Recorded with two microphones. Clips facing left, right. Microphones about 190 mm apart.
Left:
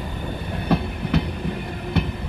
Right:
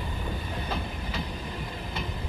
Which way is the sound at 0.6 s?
65° left (ahead or behind).